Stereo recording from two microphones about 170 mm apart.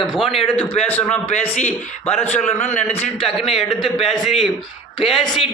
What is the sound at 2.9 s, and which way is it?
Speech, 40° left (ahead or behind).